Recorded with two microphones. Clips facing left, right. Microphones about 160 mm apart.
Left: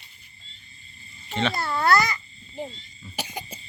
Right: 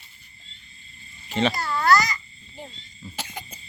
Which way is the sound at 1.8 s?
55° left (ahead or behind).